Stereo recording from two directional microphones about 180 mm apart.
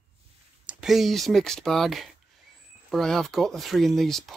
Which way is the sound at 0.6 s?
Centre (ahead or behind).